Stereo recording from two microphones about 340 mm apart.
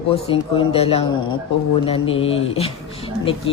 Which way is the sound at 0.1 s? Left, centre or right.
Centre.